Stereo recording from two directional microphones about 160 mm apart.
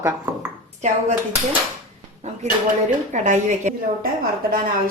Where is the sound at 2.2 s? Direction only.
45° right (ahead or behind).